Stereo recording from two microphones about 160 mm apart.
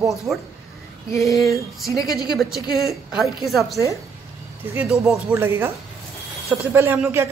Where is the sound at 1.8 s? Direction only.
Centre (ahead or behind).